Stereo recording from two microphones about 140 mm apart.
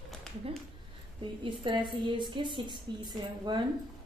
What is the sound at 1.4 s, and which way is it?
A woman's voice, 35° right (ahead or behind).